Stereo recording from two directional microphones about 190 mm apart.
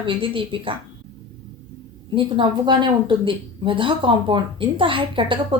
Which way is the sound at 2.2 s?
25° right (ahead or behind).